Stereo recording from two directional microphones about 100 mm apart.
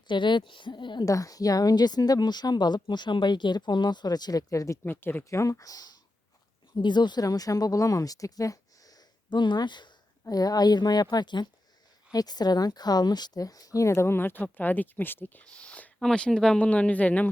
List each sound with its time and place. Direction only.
0.1 s a woman's voice: 50° left (ahead or behind)
1.0 s a woman's voice: 35° left (ahead or behind)
4.8 s speech: 20° left (ahead or behind); by 9.9 s 50° left (ahead or behind)
10.2 s a woman's voice: 40° left (ahead or behind); by 17.2 s 15° left (ahead or behind)